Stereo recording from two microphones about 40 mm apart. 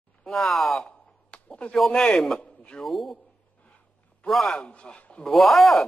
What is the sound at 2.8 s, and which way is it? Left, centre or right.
Speech, centre.